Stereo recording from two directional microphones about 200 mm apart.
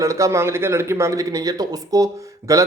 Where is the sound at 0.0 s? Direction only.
15° right (ahead or behind).